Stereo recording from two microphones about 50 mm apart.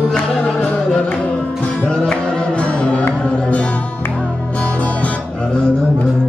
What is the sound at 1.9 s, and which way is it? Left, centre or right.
Music, centre.